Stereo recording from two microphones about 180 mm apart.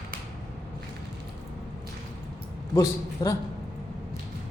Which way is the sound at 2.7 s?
20° left (ahead or behind).